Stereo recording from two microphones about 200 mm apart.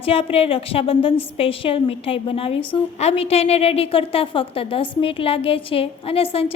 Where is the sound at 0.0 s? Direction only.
30° left (ahead or behind).